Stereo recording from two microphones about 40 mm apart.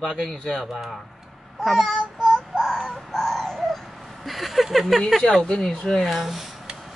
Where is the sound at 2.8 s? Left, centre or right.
Centre.